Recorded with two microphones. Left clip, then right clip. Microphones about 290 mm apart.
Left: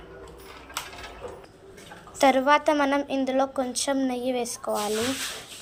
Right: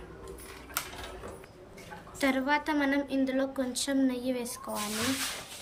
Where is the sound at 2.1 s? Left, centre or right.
Centre.